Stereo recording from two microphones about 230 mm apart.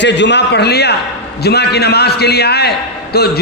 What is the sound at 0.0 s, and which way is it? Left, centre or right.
A man's voice, left.